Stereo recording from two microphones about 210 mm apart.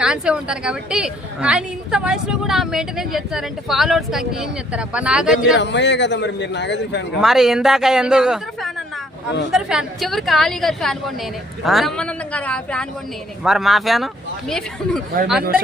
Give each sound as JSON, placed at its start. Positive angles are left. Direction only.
{"t": 0.0, "sound": "a woman's voice", "side_deg": -5}
{"t": 5.5, "sound": "a man's voice", "side_deg": 55}
{"t": 7.2, "sound": "a woman's voice", "side_deg": 0}